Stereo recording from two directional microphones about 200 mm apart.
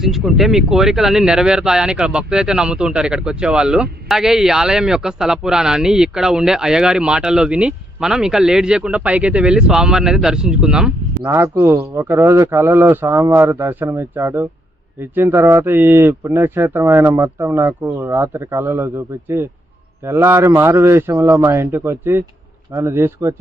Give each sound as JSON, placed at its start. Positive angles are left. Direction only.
{"t": 0.0, "sound": "a man's voice", "side_deg": 0}